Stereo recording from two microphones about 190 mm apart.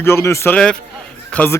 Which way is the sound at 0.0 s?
15° left (ahead or behind).